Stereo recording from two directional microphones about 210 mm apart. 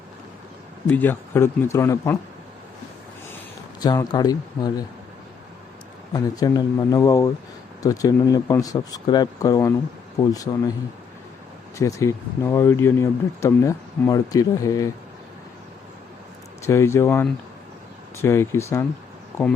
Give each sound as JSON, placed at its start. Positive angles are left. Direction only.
{"t": 0.9, "sound": "speech", "side_deg": 10}
{"t": 3.8, "sound": "speech", "side_deg": 20}
{"t": 6.1, "sound": "speech", "side_deg": 15}
{"t": 11.8, "sound": "speech", "side_deg": 15}
{"t": 16.6, "sound": "speech", "side_deg": 15}